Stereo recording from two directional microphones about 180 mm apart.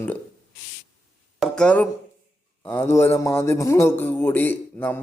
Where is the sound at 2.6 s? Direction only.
10° left (ahead or behind).